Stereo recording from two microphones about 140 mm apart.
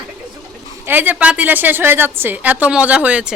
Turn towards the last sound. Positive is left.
turn(degrees=-10)  # may be behind; listen again after turning